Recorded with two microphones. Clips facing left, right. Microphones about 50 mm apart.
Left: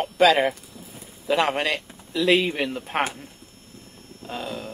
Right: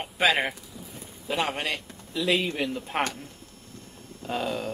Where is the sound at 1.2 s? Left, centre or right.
Left.